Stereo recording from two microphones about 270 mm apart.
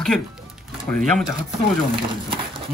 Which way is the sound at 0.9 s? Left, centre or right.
Centre.